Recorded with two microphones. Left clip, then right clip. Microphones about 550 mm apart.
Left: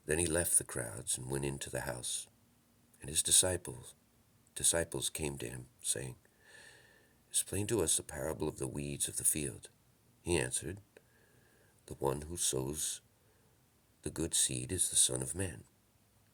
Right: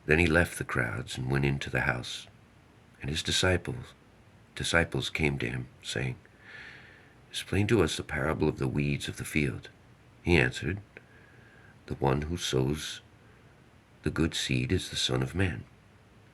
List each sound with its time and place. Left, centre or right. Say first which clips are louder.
0.1 s speech: right 10 dB; left
11.9 s speech: right 7 dB; left
14.0 s speech: right 6 dB; left